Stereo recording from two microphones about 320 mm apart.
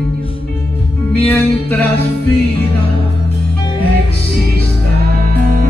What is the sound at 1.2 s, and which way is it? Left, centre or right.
Music, centre.